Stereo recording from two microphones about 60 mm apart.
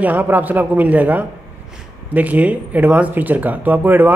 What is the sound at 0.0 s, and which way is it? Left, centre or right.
Speech, right.